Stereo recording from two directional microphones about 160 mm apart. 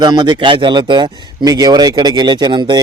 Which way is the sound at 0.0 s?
25° right (ahead or behind).